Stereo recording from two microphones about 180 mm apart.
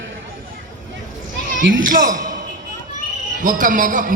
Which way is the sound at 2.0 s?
45° right (ahead or behind).